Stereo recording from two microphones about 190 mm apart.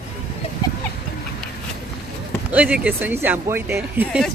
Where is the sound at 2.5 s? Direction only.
5° right (ahead or behind).